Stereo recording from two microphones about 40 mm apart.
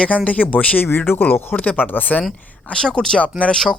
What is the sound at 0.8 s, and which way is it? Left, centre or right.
Speech, left.